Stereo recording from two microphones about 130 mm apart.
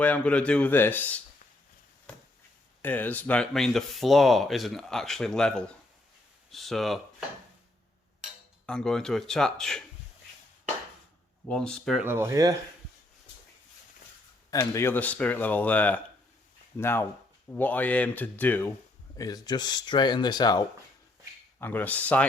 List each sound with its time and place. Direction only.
0.0 s speech: 10° left (ahead or behind)
2.8 s speech: 15° left (ahead or behind)
8.6 s speech: 5° left (ahead or behind)
11.4 s speech: 5° left (ahead or behind)
11.9 s speech: 20° right (ahead or behind)
14.5 s speech: 25° left (ahead or behind)
19.1 s speech: 30° left (ahead or behind)
21.6 s speech: 15° left (ahead or behind)